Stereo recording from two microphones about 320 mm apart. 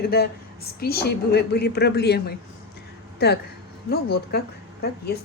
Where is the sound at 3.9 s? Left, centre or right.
Left.